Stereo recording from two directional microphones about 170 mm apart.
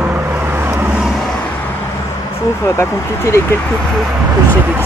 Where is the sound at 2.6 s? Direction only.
15° left (ahead or behind).